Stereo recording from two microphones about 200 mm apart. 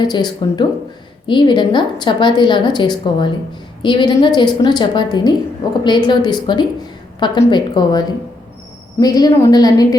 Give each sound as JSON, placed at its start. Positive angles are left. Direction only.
{"t": 0.0, "sound": "a woman's voice", "side_deg": 20}